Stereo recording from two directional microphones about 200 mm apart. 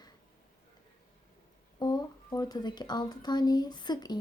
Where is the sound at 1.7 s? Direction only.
20° left (ahead or behind).